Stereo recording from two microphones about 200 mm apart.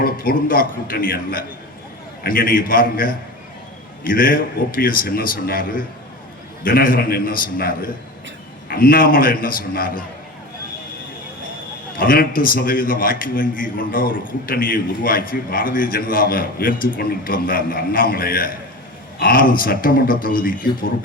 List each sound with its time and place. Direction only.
0.0 s a man's voice: 45° left (ahead or behind)
8.7 s a man's voice: 45° left (ahead or behind)
11.9 s a man's voice: 45° left (ahead or behind)